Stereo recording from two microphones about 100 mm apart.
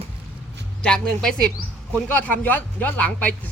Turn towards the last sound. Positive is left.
turn(degrees=15)  # may be behind; listen again after turning